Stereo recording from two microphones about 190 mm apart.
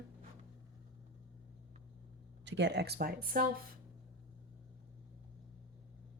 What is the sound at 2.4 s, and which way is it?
Speech, 65° right (ahead or behind).